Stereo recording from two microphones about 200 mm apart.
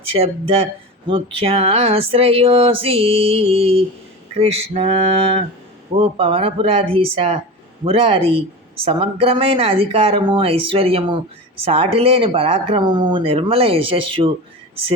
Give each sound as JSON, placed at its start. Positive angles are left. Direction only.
{"t": 0.1, "sound": "speech", "side_deg": -30}